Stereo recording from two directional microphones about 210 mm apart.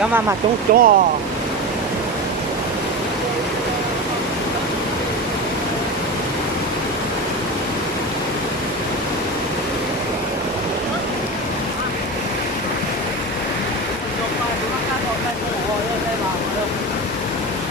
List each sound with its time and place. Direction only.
0.7 s speech: 40° right (ahead or behind)